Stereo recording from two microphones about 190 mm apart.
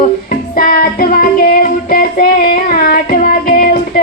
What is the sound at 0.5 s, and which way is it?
Music, 50° left (ahead or behind).